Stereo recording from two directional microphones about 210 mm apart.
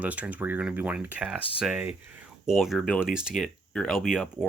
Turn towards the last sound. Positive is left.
turn(degrees=-5)  # may be behind; listen again after turning